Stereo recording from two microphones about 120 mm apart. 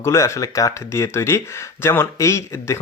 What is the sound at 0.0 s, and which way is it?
Speech, 25° left (ahead or behind).